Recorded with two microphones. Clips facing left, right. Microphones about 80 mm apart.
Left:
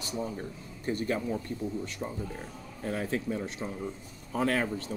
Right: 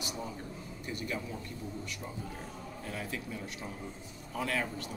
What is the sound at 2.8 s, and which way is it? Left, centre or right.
Speech, left.